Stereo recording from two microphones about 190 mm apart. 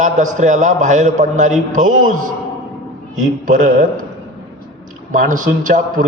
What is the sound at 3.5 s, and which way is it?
Speech, 45° right (ahead or behind).